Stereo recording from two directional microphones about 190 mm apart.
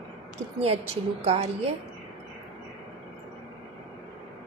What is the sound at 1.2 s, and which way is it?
Speech, 30° right (ahead or behind).